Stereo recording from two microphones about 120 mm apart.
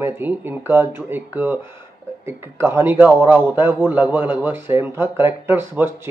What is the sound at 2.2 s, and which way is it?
A man's voice, 20° right (ahead or behind).